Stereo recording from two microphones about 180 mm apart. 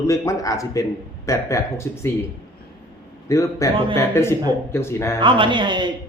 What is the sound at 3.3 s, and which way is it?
A man's voice, 15° left (ahead or behind).